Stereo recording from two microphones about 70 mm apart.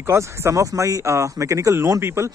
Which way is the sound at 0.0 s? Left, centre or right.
Right.